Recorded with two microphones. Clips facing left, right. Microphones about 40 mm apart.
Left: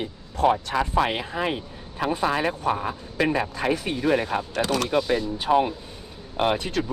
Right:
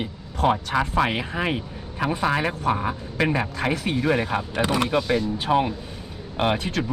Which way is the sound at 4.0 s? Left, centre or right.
Centre.